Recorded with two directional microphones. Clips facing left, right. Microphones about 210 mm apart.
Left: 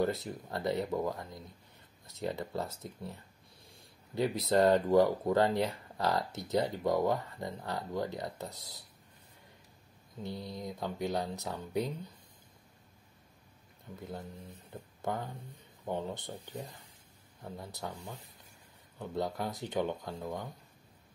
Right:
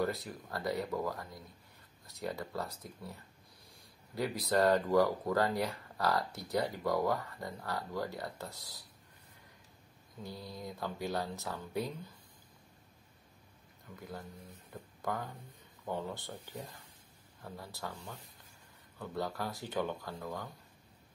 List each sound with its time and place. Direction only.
0.0 s speech: 25° left (ahead or behind)
10.2 s speech: 20° left (ahead or behind)
13.9 s speech: 25° left (ahead or behind)
14.7 s a sound: 25° left (ahead or behind)
15.8 s speech: 20° left (ahead or behind)